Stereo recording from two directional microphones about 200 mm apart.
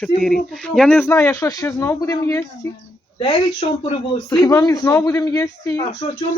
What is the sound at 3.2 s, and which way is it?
Speech, 30° left (ahead or behind).